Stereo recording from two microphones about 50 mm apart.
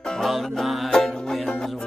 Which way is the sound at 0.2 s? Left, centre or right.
Centre.